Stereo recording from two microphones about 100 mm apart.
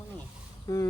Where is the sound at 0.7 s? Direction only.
35° left (ahead or behind).